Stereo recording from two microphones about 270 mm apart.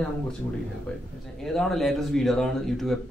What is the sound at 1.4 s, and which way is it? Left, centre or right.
Speech, centre.